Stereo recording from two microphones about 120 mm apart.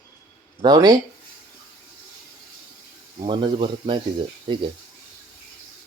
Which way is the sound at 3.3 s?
45° right (ahead or behind).